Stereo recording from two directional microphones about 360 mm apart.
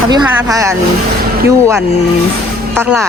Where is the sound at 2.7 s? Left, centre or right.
Centre.